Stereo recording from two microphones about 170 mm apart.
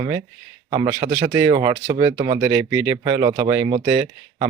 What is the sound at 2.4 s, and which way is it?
Speech, 15° right (ahead or behind).